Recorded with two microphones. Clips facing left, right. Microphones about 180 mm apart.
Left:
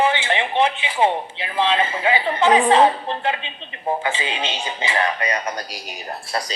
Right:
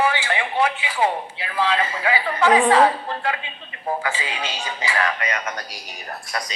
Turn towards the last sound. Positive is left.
turn(degrees=30)  # may be behind; listen again after turning